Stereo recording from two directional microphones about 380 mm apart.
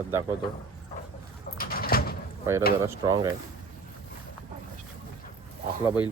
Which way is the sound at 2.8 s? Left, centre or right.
Centre.